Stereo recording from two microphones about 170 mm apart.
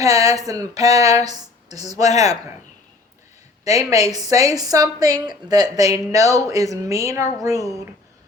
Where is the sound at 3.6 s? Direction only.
20° right (ahead or behind).